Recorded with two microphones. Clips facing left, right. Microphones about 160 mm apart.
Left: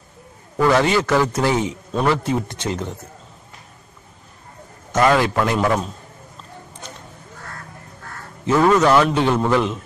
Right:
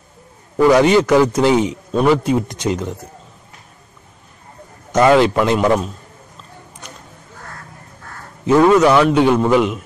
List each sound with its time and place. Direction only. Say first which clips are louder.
0.6 s a man's voice: right 5 dB; 15° right (ahead or behind)
4.9 s a man's voice: right 5 dB; 20° right (ahead or behind)
8.5 s a man's voice: right 4 dB; 10° right (ahead or behind)